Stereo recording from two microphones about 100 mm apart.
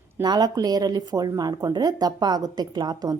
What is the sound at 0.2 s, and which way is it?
Speech, 40° right (ahead or behind).